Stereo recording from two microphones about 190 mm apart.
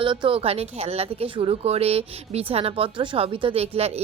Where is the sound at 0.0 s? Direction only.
25° right (ahead or behind).